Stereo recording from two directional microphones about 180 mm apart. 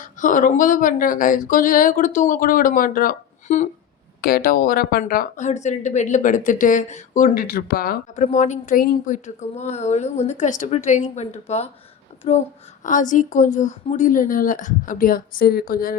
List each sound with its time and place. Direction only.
0.0 s speech: 45° left (ahead or behind)
8.1 s a woman's voice: 40° left (ahead or behind)